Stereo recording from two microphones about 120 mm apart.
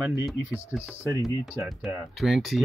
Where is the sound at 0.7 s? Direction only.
10° right (ahead or behind).